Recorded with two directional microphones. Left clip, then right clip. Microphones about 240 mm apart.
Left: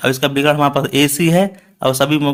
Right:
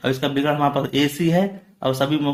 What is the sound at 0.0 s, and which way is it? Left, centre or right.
Speech, left.